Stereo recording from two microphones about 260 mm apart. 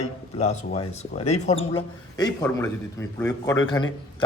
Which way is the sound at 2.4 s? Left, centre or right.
Centre.